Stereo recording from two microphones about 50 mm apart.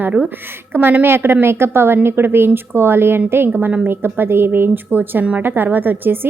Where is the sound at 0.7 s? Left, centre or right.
Right.